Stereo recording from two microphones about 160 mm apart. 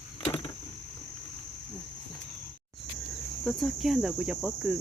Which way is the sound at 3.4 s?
Centre (ahead or behind).